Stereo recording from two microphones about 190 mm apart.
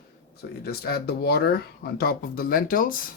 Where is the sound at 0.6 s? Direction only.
55° left (ahead or behind).